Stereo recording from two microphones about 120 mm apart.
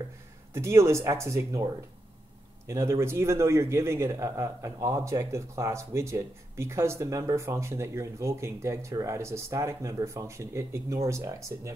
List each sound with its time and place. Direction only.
0.5 s a man's voice: 20° right (ahead or behind)